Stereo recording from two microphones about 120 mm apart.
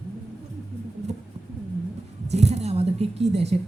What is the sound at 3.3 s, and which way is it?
Speech, 60° right (ahead or behind).